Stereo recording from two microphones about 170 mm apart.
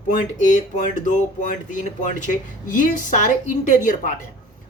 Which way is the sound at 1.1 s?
45° left (ahead or behind).